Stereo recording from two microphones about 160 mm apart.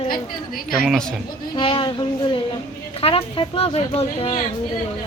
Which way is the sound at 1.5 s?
30° left (ahead or behind).